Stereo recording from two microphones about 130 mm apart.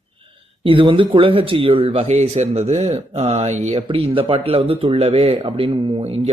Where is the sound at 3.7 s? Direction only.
40° right (ahead or behind).